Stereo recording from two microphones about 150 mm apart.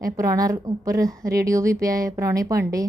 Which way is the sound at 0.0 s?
20° right (ahead or behind).